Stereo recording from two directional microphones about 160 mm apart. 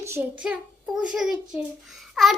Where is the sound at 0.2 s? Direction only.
15° right (ahead or behind).